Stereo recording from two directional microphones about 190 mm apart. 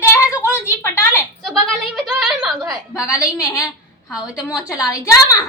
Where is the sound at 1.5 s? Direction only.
Centre (ahead or behind).